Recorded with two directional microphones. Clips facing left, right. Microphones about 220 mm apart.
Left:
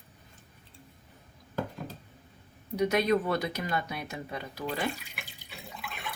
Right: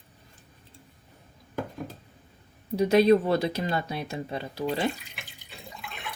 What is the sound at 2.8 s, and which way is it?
Speech, 30° right (ahead or behind).